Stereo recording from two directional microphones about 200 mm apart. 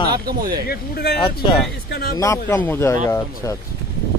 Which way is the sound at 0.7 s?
55° left (ahead or behind).